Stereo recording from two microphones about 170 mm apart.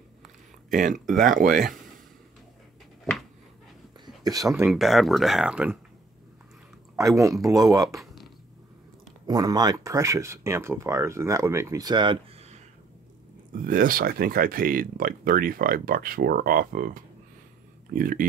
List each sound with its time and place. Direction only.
1.1 s speech: 50° right (ahead or behind)
4.0 s a sound: 20° right (ahead or behind)
4.6 s speech: centre (ahead or behind)
7.0 s speech: 20° right (ahead or behind)
7.9 s a sound: centre (ahead or behind)
9.3 s speech: 20° right (ahead or behind); by 12.6 s 40° right (ahead or behind)
13.7 s speech: 55° right (ahead or behind)